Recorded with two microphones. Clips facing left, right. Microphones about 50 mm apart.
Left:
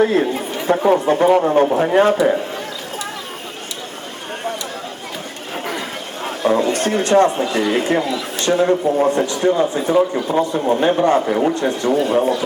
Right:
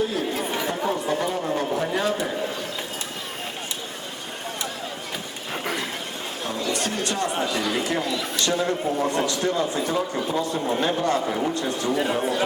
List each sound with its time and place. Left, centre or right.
0.0 s a man's voice: left
6.2 s a sound: left
6.6 s a man's voice: left